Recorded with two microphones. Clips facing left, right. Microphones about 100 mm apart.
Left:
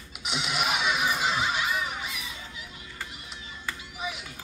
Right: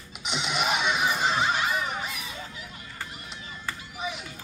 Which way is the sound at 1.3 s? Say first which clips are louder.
Right 2 dB; 40° right (ahead or behind).